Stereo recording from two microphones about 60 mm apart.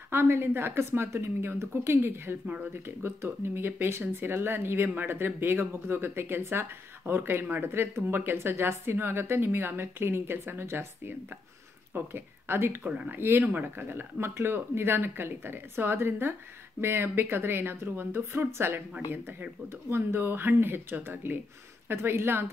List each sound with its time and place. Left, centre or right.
0.1 s a woman's voice: right
2.4 s speech: right
2.7 s a woman's voice: right
13.4 s a woman's voice: right
19.9 s a woman's voice: right